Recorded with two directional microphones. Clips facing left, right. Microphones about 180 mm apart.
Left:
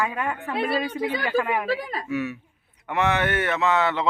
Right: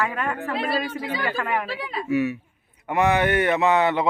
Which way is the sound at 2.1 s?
10° right (ahead or behind).